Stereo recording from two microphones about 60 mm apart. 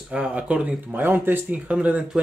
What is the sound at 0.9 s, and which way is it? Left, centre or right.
Speech, right.